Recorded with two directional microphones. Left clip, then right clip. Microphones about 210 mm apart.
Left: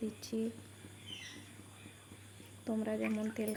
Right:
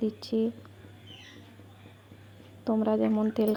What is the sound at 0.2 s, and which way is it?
Speech, 10° right (ahead or behind).